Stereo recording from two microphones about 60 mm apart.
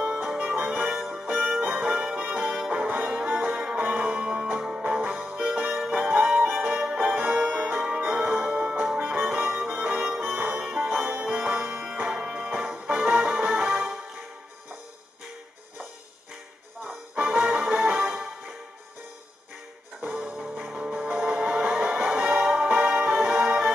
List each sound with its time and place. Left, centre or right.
0.0 s music: centre
16.8 s music: right
20.0 s music: right